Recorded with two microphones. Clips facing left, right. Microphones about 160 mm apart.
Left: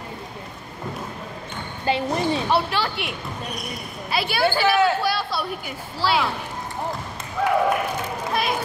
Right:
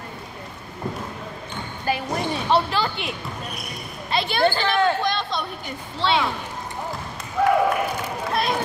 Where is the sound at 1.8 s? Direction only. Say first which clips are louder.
Left 3 dB; 25° left (ahead or behind).